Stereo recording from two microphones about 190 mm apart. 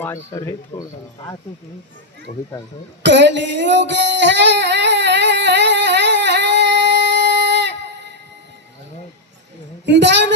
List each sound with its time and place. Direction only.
0.0 s speech: 15° left (ahead or behind)
3.0 s a sound: 70° right (ahead or behind)
9.8 s a woman's voice: 65° right (ahead or behind)